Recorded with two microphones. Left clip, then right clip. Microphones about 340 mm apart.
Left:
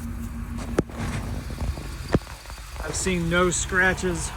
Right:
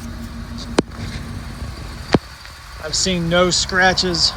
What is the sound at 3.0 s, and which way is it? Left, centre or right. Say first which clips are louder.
Speech: right 6 dB; centre.